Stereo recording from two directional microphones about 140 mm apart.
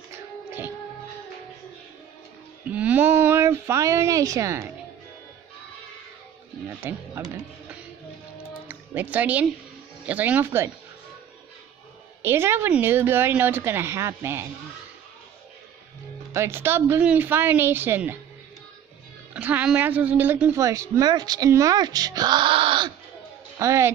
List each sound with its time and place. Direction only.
0.1 s music: 15° right (ahead or behind)
2.6 s a sound: 10° right (ahead or behind)
6.8 s a woman's voice: 15° right (ahead or behind)
8.6 s a woman's voice: 10° right (ahead or behind)
12.2 s a woman's voice: 15° right (ahead or behind)
16.3 s a woman's voice: 20° right (ahead or behind)
19.3 s a woman's voice: 10° right (ahead or behind); by 22.8 s 40° right (ahead or behind)
23.6 s speech: 20° right (ahead or behind)